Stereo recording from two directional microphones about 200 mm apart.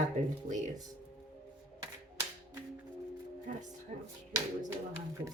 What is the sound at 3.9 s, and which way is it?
Speech, 40° right (ahead or behind).